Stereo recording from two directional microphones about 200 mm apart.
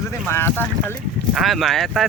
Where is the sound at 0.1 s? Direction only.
10° left (ahead or behind).